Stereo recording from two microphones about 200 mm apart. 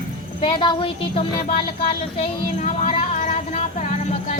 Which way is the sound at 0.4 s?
25° left (ahead or behind).